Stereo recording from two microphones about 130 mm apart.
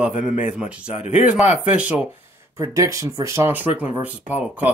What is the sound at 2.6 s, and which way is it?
Speech, 25° right (ahead or behind).